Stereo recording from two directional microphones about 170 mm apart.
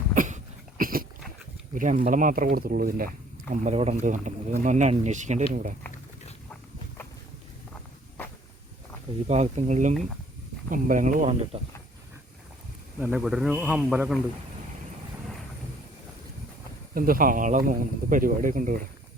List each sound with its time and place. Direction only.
0.1 s a sound: 45° right (ahead or behind)
1.7 s speech: 50° right (ahead or behind)
3.5 s speech: 45° right (ahead or behind)
9.2 s speech: 40° right (ahead or behind)
13.0 s speech: 5° right (ahead or behind)
16.9 s speech: 55° right (ahead or behind)